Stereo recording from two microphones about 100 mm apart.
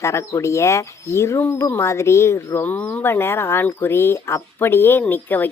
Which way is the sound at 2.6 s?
20° left (ahead or behind).